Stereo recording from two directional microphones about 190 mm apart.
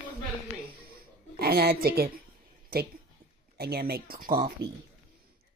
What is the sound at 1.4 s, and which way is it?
Speech, 55° right (ahead or behind).